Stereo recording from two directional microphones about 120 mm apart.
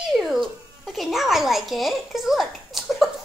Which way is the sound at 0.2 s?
Centre (ahead or behind).